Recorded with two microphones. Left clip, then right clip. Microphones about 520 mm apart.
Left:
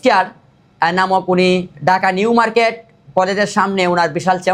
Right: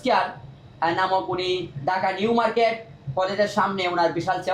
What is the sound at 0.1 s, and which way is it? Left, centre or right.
Speech, left.